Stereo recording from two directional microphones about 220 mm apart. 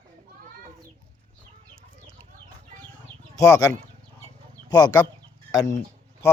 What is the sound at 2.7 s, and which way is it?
Chicken, 35° right (ahead or behind).